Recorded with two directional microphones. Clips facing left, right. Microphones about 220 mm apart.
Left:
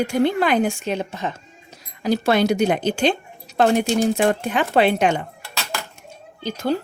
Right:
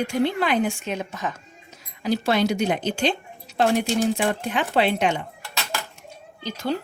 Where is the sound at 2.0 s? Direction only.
45° left (ahead or behind).